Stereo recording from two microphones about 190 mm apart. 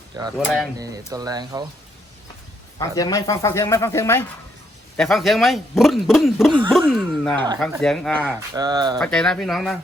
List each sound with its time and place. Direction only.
0.3 s speech: centre (ahead or behind)
0.8 s speech: 20° right (ahead or behind)
2.7 s speech: 20° left (ahead or behind)
4.9 s speech: centre (ahead or behind)
8.5 s speech: 20° right (ahead or behind)
9.0 s speech: 5° left (ahead or behind)